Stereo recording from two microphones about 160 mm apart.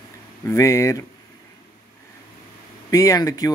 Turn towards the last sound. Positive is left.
turn(degrees=20)  # may be behind; listen again after turning